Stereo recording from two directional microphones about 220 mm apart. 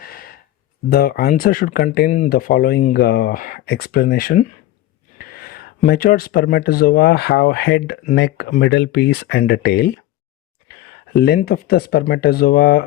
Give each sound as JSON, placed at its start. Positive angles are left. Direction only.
{"t": 0.0, "sound": "gasp", "side_deg": 45}
{"t": 0.9, "sound": "speech", "side_deg": 45}
{"t": 11.1, "sound": "speech", "side_deg": 45}